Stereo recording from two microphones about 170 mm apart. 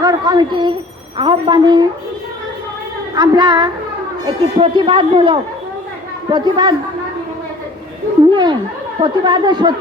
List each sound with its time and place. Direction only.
0.0 s speech: 25° right (ahead or behind)
3.2 s speech: 25° right (ahead or behind)
9.0 s speech: 25° right (ahead or behind)